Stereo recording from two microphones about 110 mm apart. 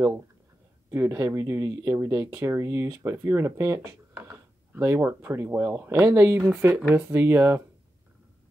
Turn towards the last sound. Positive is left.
turn(degrees=-20)  # may be behind; listen again after turning